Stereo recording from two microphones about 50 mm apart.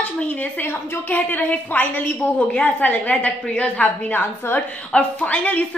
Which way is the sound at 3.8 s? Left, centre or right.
Left.